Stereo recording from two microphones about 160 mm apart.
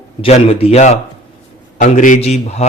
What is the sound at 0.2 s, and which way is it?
Speech, 40° left (ahead or behind).